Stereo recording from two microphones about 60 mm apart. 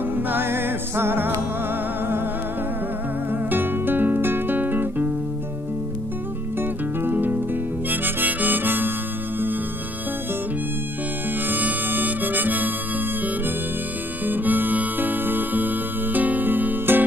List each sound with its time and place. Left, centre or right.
0.1 s music: right
3.3 s music: right
6.6 s music: right
7.9 s harmonica: right
11.4 s harmonica: right
14.2 s music: right